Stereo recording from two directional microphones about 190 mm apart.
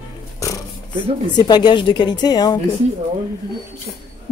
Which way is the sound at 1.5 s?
20° left (ahead or behind).